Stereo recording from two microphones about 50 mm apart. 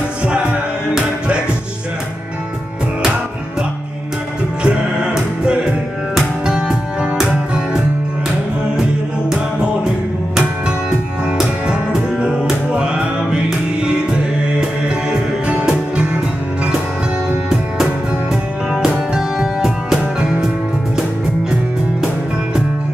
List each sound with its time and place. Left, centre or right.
0.2 s music: right
4.6 s music: centre
9.6 s music: centre
11.6 s music: centre
18.7 s music: centre